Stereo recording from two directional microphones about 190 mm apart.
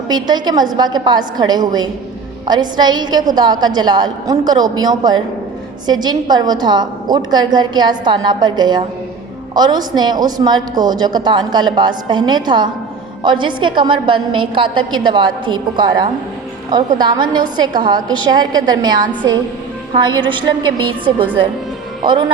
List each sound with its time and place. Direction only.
0.1 s a woman's voice: 20° right (ahead or behind)